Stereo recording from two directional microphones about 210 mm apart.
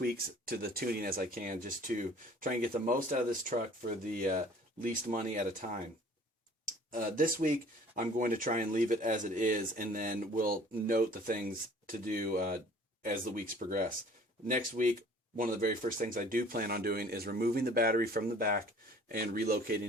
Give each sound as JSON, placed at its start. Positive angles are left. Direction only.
{"t": 0.0, "sound": "speech", "side_deg": -45}
{"t": 6.9, "sound": "speech", "side_deg": -40}